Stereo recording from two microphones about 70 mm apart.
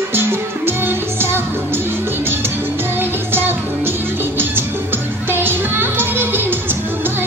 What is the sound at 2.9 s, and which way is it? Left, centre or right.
Music, right.